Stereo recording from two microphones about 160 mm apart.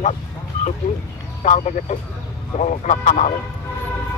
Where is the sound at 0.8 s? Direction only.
40° left (ahead or behind).